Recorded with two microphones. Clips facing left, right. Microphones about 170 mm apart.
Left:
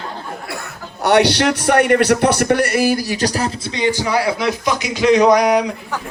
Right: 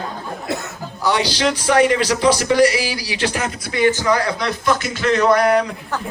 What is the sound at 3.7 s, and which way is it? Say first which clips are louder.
A man's voice: right 2 dB; 15° left (ahead or behind).